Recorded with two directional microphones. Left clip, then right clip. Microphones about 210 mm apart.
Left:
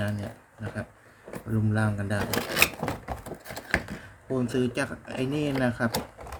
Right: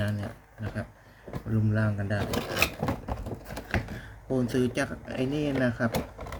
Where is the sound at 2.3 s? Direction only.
30° left (ahead or behind).